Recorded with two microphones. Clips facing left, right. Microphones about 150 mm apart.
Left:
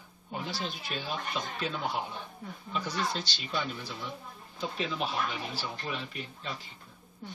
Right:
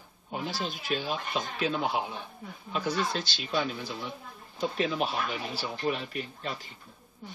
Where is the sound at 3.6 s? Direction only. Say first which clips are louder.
Right 5 dB; 65° right (ahead or behind).